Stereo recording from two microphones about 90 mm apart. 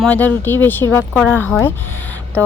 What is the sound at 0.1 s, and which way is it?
Speech, 20° left (ahead or behind).